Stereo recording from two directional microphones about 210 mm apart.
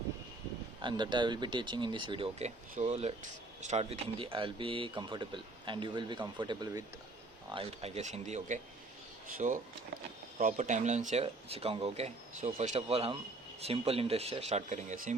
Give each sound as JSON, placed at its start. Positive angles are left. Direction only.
{"t": 0.8, "sound": "speech", "side_deg": -20}